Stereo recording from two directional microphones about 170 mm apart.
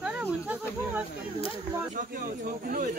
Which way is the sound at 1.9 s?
55° right (ahead or behind).